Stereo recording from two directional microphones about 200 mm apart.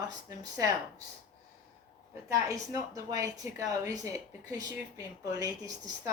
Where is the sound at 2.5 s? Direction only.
15° right (ahead or behind).